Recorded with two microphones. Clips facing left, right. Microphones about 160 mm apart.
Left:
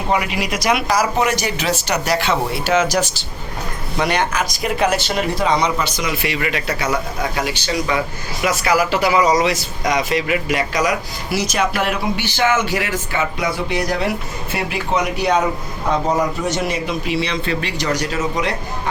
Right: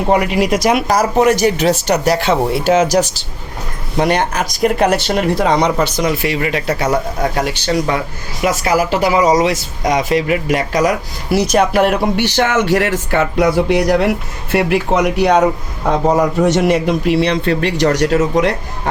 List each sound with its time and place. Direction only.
0.1 s speech: 45° right (ahead or behind)
5.8 s speech: 45° right (ahead or behind)
8.4 s speech: 45° right (ahead or behind)
9.1 s speech: 30° right (ahead or behind)
10.0 s a man's voice: 40° right (ahead or behind); by 15.4 s 75° right (ahead or behind)
16.5 s speech: 70° right (ahead or behind)